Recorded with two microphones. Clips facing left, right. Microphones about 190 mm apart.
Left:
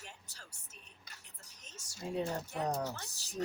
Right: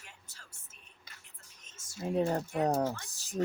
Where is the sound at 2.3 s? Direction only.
50° right (ahead or behind).